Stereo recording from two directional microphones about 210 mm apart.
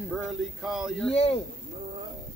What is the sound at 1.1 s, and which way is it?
Speech, 25° left (ahead or behind).